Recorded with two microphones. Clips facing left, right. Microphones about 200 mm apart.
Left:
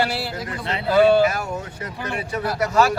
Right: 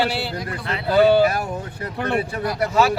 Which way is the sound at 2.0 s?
60° right (ahead or behind).